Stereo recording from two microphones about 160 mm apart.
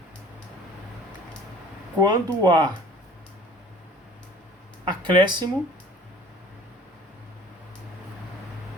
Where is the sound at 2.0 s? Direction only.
25° right (ahead or behind).